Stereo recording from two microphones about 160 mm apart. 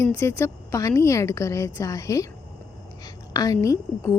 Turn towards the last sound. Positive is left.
turn(degrees=20)  # may be behind; listen again after turning